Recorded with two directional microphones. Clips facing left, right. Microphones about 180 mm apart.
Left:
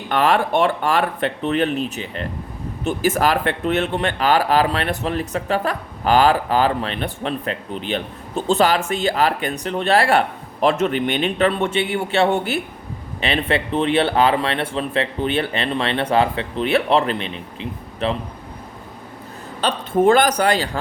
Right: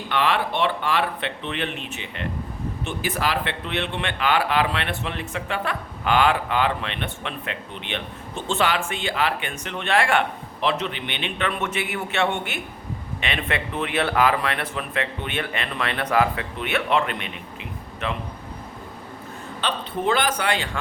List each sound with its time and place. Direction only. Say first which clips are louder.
0.1 s speech: left 6 dB; 45° left (ahead or behind)
19.6 s speech: left 9 dB; 45° left (ahead or behind)